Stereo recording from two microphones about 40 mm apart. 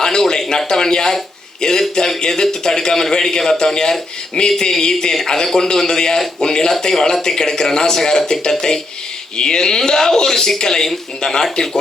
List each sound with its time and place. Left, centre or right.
0.0 s a man's voice: centre